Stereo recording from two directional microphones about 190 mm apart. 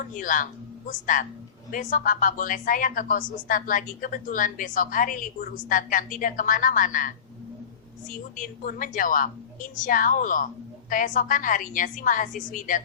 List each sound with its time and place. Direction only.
0.0 s speech: 45° left (ahead or behind)
8.4 s speech: 45° left (ahead or behind)